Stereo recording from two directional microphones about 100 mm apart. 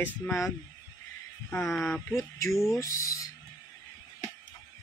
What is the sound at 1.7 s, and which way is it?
Speech, 5° left (ahead or behind).